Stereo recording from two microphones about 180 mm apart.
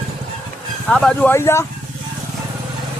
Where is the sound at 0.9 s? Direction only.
5° left (ahead or behind).